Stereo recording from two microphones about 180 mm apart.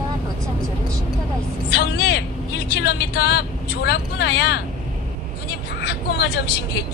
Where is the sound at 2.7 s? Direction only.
65° left (ahead or behind).